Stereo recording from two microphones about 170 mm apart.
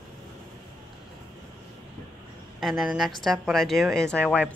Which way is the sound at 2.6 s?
Centre (ahead or behind).